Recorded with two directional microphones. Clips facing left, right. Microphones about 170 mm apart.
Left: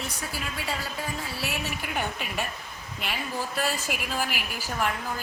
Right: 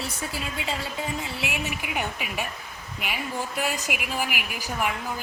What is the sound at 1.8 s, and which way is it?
A woman's voice, 10° right (ahead or behind).